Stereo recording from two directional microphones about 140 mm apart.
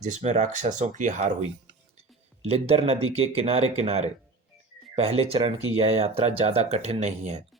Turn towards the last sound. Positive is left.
turn(degrees=-55)  # may be behind; listen again after turning